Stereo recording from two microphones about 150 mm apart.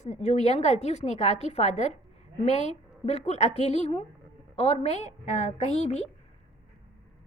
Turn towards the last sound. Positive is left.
turn(degrees=45)  # may be behind; listen again after turning